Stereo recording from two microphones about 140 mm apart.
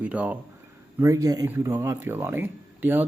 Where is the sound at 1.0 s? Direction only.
25° right (ahead or behind).